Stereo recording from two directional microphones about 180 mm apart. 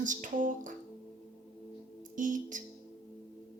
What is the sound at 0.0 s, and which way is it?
Music, 45° right (ahead or behind).